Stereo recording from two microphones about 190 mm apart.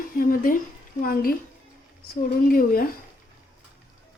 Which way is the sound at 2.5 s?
50° left (ahead or behind).